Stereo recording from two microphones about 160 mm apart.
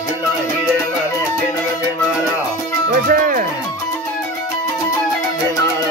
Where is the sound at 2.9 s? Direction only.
60° right (ahead or behind).